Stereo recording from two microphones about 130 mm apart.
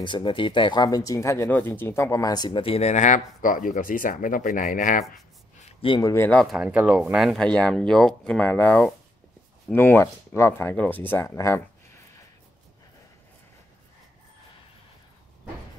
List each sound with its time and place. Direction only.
0.0 s speech: 40° left (ahead or behind)
2.6 s speech: 50° left (ahead or behind); by 5.0 s 90° left
5.6 s a sound: 55° left (ahead or behind)
5.9 s speech: 30° left (ahead or behind)
6.1 s speech: 15° left (ahead or behind)
6.4 s speech: 5° right (ahead or behind); by 11.6 s 25° left (ahead or behind)